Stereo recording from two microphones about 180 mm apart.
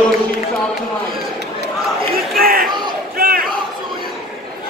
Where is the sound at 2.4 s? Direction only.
55° right (ahead or behind).